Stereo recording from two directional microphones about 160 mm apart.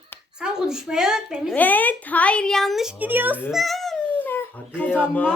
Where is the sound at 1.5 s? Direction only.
10° left (ahead or behind); by 3.4 s 10° right (ahead or behind).